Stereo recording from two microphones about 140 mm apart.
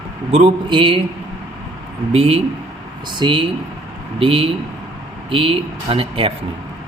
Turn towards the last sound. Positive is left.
turn(degrees=-40)  # may be behind; listen again after turning